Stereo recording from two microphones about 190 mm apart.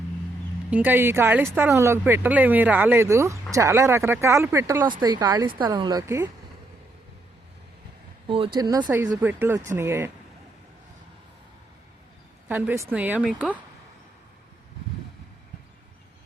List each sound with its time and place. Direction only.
0.7 s speech: 10° right (ahead or behind)
8.5 s speech: 20° right (ahead or behind)
8.9 s speech: 10° right (ahead or behind)
12.5 s speech: 10° right (ahead or behind)